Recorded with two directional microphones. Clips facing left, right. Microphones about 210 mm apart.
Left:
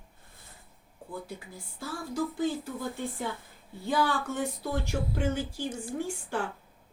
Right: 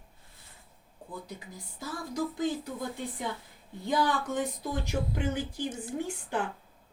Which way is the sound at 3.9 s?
20° right (ahead or behind).